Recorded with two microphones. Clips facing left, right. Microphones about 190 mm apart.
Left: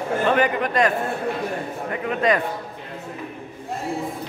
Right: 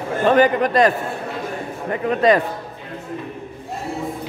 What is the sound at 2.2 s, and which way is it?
Speech, 35° right (ahead or behind).